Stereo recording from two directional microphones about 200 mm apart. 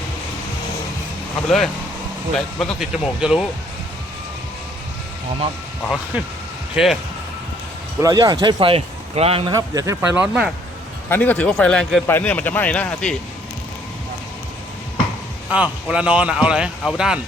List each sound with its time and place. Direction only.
1.5 s a man's voice: centre (ahead or behind)
6.8 s a man's voice: 5° right (ahead or behind)
7.9 s speech: 15° right (ahead or behind)
9.5 s speech: 15° right (ahead or behind)
11.1 s a man's voice: 5° left (ahead or behind)
15.4 s a man's voice: 5° right (ahead or behind)